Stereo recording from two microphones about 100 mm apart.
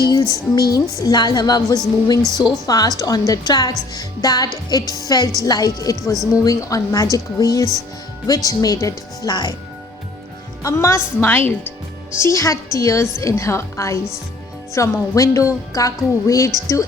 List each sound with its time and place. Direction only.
0.1 s a woman's voice: 40° left (ahead or behind)
10.6 s a woman's voice: 30° left (ahead or behind)
11.3 s a woman's voice: 20° left (ahead or behind)